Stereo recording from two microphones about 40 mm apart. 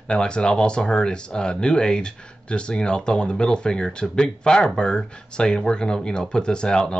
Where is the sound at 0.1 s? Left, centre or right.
Left.